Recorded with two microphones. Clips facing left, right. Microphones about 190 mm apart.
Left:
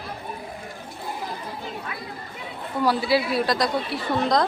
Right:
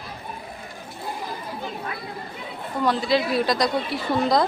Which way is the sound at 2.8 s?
10° left (ahead or behind).